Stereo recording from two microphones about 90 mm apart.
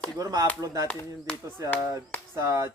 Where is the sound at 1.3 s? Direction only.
10° left (ahead or behind).